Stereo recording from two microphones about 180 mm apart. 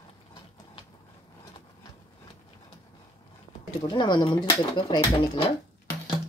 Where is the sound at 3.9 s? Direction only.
25° left (ahead or behind).